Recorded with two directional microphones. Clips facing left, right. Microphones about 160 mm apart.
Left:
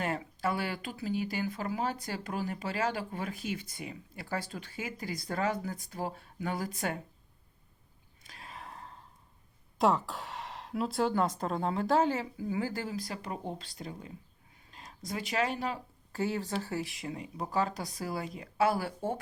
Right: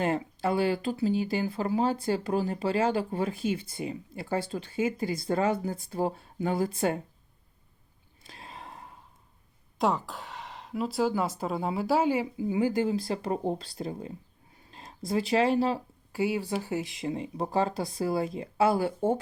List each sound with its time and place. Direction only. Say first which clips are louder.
0.0 s speech: right 5 dB; 25° right (ahead or behind)
8.2 s a sound: right 2 dB; 25° right (ahead or behind)
9.7 s a woman's voice: even; centre (ahead or behind); by 15.8 s 30° right (ahead or behind)
16.1 s speech: right 4 dB; 10° right (ahead or behind)